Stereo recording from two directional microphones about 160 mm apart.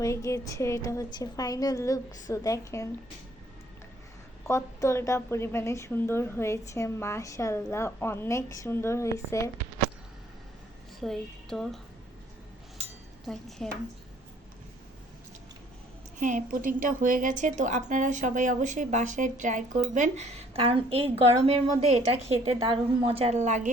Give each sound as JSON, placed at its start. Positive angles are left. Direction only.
{"t": 0.0, "sound": "a woman's voice", "side_deg": 20}
{"t": 4.4, "sound": "a woman's voice", "side_deg": 15}
{"t": 11.0, "sound": "speech", "side_deg": 0}
{"t": 13.2, "sound": "speech", "side_deg": 0}
{"t": 16.1, "sound": "a woman's voice", "side_deg": -50}